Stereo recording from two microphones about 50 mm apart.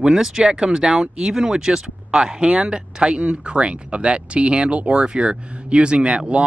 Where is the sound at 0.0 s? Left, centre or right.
Centre.